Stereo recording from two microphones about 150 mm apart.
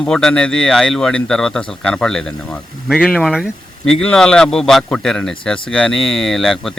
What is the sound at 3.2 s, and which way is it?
Speech, 5° right (ahead or behind).